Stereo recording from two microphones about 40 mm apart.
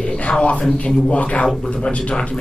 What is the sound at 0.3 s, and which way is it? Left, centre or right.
A woman's voice, left.